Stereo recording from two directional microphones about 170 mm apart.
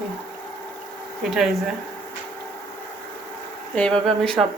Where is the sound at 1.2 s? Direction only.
Centre (ahead or behind).